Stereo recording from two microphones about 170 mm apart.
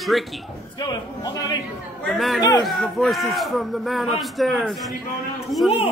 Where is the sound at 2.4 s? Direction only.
25° left (ahead or behind).